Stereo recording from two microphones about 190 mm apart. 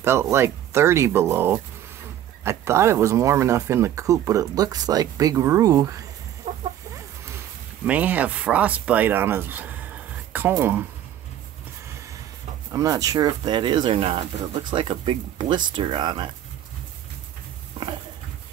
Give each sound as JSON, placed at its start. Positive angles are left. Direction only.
{"t": 0.0, "sound": "speech", "side_deg": -15}
{"t": 6.5, "sound": "chicken", "side_deg": -30}
{"t": 7.8, "sound": "speech", "side_deg": -10}
{"t": 12.7, "sound": "speech", "side_deg": -20}
{"t": 17.8, "sound": "a sound", "side_deg": -25}